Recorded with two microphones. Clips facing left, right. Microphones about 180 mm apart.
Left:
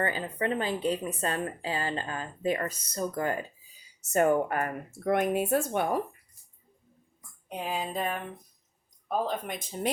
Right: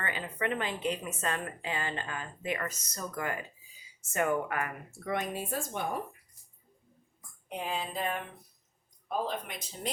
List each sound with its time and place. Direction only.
0.0 s a woman's voice: 35° left (ahead or behind); by 6.0 s 65° left (ahead or behind)
7.4 s a sound: 40° left (ahead or behind)
9.0 s speech: 50° left (ahead or behind)